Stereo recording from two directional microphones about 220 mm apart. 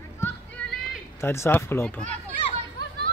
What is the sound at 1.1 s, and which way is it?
Speech, 10° left (ahead or behind).